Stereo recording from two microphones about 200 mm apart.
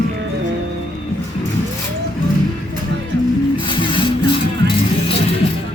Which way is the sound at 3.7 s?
25° left (ahead or behind).